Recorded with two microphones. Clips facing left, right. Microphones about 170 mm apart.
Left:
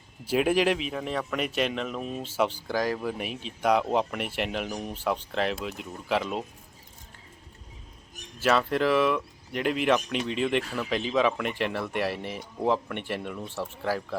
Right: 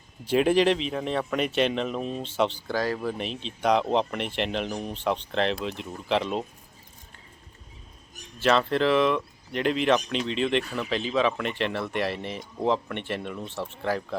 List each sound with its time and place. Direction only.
0.3 s speech: 5° left (ahead or behind)
8.4 s speech: 10° left (ahead or behind)